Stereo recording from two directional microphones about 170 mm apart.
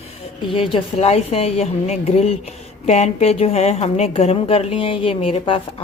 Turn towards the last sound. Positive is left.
turn(degrees=30)  # may be behind; listen again after turning